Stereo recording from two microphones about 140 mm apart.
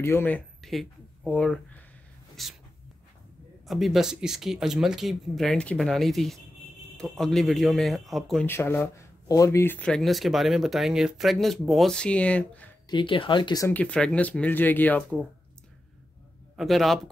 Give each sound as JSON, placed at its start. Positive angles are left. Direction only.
{"t": 0.0, "sound": "speech", "side_deg": 15}
{"t": 0.6, "sound": "a sound", "side_deg": 0}
{"t": 1.3, "sound": "speech", "side_deg": 10}
{"t": 3.6, "sound": "speech", "side_deg": 0}
{"t": 8.5, "sound": "speech", "side_deg": 15}
{"t": 12.9, "sound": "speech", "side_deg": 35}
{"t": 13.7, "sound": "speech", "side_deg": 10}
{"t": 16.5, "sound": "speech", "side_deg": 0}